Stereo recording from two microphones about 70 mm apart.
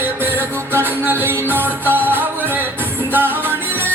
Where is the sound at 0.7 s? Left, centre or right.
Right.